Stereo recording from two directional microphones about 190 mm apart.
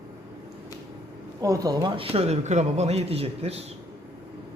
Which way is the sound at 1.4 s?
20° right (ahead or behind).